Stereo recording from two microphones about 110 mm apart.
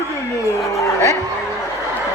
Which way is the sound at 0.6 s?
25° left (ahead or behind).